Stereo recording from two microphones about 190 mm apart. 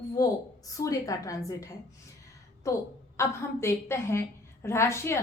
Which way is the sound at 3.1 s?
15° left (ahead or behind).